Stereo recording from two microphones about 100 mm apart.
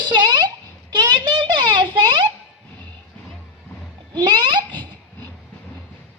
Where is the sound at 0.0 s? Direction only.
50° right (ahead or behind).